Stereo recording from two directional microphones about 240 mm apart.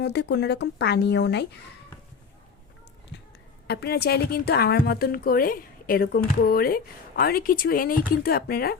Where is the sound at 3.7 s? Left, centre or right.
Left.